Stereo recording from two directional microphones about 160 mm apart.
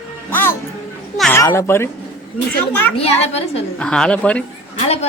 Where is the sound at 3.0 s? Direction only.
40° left (ahead or behind).